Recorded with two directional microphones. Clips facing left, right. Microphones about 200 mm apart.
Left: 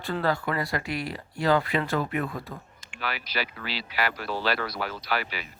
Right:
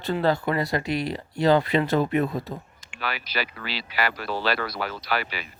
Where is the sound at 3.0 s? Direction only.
75° right (ahead or behind).